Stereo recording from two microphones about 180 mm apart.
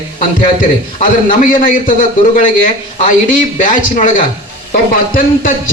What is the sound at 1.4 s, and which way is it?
A man's voice, 50° left (ahead or behind).